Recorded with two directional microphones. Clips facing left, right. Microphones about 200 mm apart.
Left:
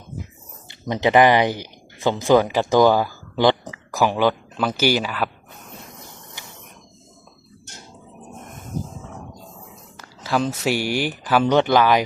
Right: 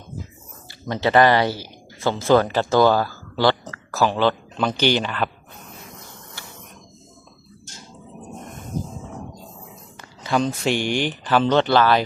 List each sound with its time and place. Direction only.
0.7 s speech: 15° left (ahead or behind)
6.4 s a sound: 15° left (ahead or behind)
10.0 s speech: centre (ahead or behind)